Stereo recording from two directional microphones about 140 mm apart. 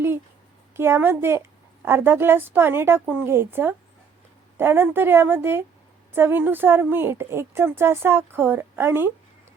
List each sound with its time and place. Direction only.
0.8 s a woman's voice: 15° right (ahead or behind)